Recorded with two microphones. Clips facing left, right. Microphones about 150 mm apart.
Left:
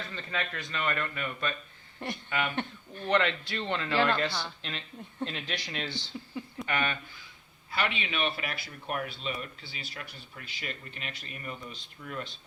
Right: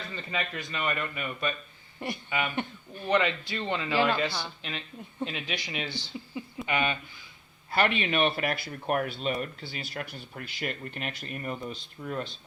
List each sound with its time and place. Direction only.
0.2 s a man's voice: 10° right (ahead or behind)
7.7 s speech: 45° right (ahead or behind)
12.0 s speech: 35° right (ahead or behind)